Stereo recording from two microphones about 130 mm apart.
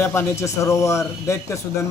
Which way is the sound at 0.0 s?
20° left (ahead or behind).